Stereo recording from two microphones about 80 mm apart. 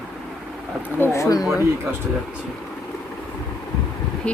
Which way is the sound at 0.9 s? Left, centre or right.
Left.